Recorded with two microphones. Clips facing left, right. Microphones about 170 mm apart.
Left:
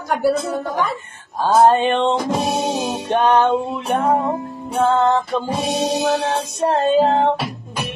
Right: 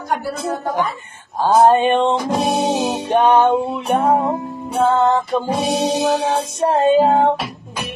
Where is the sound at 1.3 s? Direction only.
15° right (ahead or behind).